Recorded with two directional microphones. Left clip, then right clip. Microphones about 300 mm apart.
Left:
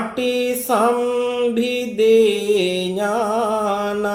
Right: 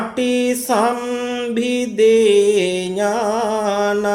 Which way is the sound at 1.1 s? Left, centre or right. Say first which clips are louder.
Left 3 dB; right.